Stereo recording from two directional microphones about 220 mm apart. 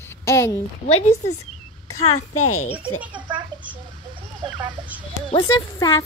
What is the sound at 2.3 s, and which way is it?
Speech, 85° left.